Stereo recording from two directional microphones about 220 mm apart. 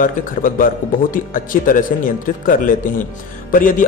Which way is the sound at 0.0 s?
40° left (ahead or behind).